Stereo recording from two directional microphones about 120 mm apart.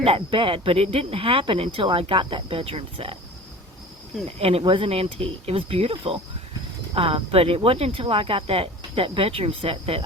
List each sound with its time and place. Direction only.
0.0 s speech: 50° right (ahead or behind)
4.4 s speech: 55° right (ahead or behind)